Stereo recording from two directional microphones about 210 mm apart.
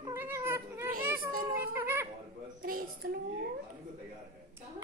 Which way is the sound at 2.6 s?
45° right (ahead or behind).